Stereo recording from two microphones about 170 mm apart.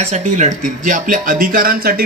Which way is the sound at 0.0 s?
45° right (ahead or behind).